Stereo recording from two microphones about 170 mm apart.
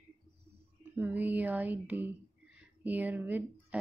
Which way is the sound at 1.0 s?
10° right (ahead or behind).